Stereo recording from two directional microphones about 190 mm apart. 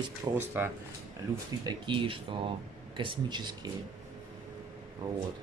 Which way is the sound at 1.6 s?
25° right (ahead or behind).